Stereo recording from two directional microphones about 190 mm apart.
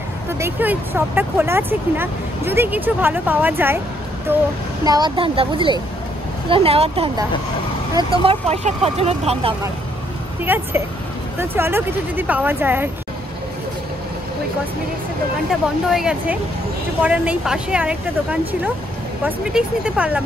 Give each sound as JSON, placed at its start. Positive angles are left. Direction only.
{"t": 0.3, "sound": "speech", "side_deg": -10}
{"t": 4.8, "sound": "speech", "side_deg": -20}
{"t": 10.4, "sound": "speech", "side_deg": -10}
{"t": 15.9, "sound": "speech", "side_deg": -5}